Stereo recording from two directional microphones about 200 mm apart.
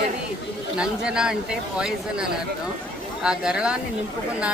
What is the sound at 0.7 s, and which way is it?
Speech, 5° right (ahead or behind).